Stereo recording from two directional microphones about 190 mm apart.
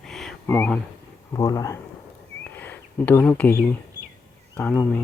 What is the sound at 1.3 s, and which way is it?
Speech, 20° left (ahead or behind).